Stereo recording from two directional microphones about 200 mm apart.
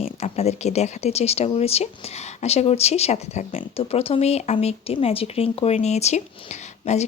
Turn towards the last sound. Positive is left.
turn(degrees=35)  # may be behind; listen again after turning